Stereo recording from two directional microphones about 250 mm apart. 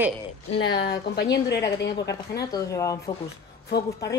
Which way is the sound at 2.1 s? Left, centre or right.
Centre.